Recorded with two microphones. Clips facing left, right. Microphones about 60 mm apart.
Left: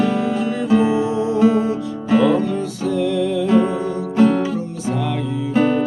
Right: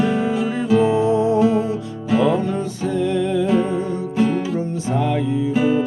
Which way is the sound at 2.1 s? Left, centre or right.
Centre.